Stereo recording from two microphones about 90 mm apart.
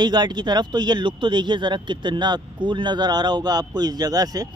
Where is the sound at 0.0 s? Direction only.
55° right (ahead or behind).